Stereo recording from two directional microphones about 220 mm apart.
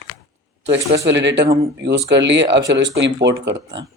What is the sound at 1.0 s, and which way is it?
Speech, 50° right (ahead or behind).